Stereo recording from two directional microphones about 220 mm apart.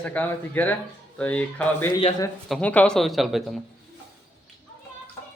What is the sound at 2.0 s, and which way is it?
Speech, 25° left (ahead or behind).